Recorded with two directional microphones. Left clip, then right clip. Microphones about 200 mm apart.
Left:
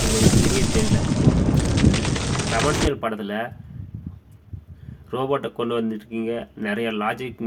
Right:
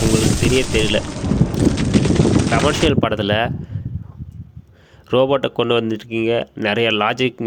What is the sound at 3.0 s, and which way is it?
Speech, 45° right (ahead or behind).